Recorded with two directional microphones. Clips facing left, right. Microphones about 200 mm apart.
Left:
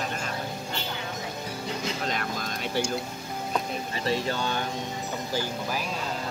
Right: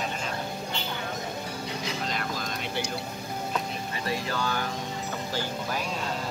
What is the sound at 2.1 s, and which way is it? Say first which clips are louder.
Vehicle: left 1 dB; 50° left (ahead or behind).